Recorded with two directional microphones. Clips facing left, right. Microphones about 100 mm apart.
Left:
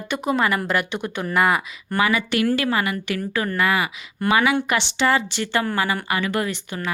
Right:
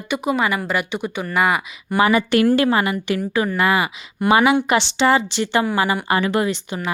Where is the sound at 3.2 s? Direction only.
15° right (ahead or behind).